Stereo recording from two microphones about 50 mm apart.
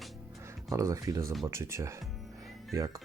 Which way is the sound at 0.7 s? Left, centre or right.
Right.